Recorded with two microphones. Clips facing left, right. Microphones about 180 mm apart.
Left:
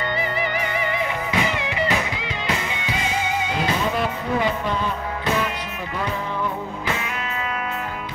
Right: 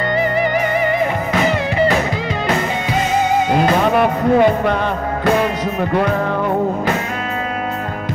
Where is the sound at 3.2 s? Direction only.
50° right (ahead or behind).